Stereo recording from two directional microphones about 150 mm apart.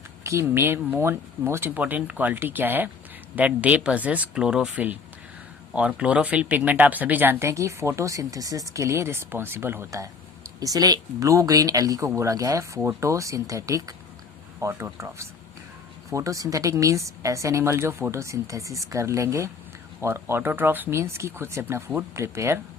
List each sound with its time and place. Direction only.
0.3 s speech: 15° right (ahead or behind)